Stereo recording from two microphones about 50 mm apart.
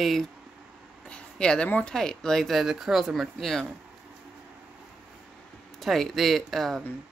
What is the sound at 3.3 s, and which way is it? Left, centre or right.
Speech, centre.